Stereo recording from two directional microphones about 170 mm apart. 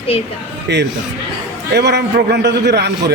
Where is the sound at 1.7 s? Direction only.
80° right.